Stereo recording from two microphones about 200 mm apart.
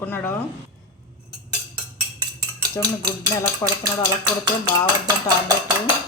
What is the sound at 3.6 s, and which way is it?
Speech, 15° left (ahead or behind).